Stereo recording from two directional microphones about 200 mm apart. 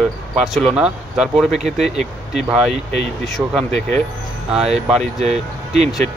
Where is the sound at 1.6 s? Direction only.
35° right (ahead or behind).